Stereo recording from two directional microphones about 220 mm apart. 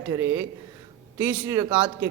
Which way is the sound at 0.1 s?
10° right (ahead or behind).